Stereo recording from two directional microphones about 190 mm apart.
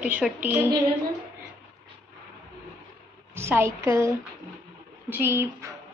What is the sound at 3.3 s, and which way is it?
A woman's voice, 15° right (ahead or behind).